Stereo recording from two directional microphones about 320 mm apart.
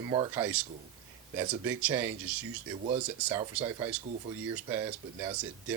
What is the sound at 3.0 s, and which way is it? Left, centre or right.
Speech, centre.